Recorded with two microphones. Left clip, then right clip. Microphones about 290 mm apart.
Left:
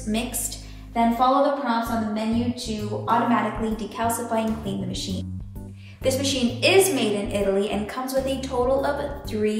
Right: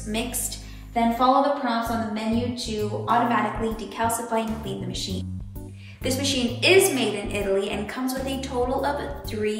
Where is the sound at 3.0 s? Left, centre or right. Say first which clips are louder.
Even; centre.